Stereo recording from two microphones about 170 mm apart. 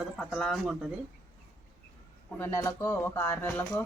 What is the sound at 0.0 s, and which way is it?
Speech, centre (ahead or behind).